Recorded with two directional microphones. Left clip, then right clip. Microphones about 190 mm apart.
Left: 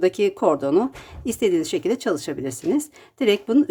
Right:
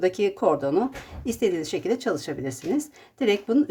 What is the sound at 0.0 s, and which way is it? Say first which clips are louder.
A woman's voice: left 3 dB; 30° left (ahead or behind).